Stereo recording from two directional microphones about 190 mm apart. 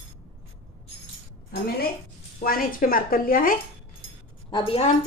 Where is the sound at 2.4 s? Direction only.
50° left (ahead or behind).